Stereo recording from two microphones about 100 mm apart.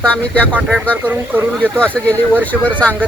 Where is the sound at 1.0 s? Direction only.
20° right (ahead or behind).